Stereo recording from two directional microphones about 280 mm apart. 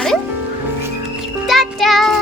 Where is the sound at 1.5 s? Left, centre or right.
Centre.